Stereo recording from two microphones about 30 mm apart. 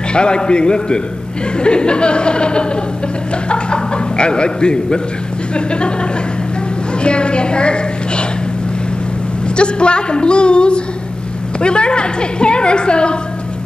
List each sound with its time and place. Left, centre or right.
0.1 s a woman's voice: left
7.0 s a sound: left
9.6 s a woman's voice: left